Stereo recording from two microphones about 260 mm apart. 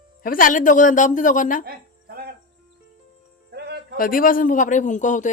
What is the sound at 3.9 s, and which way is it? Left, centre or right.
Speech, left.